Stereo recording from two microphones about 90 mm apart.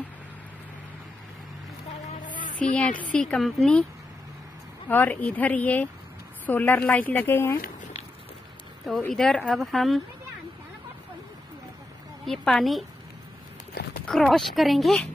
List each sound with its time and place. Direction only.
2.6 s a woman's voice: 15° left (ahead or behind)
3.4 s speech: centre (ahead or behind)
4.8 s a woman's voice: 20° left (ahead or behind)
9.0 s speech: 5° left (ahead or behind)
12.3 s speech: 5° left (ahead or behind)
14.0 s speech: 5° left (ahead or behind)